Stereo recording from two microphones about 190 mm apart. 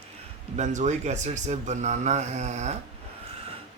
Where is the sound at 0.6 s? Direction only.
40° right (ahead or behind).